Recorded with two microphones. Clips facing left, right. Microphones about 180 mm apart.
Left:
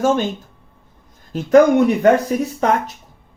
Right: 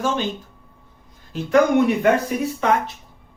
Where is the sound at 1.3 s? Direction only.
40° left (ahead or behind).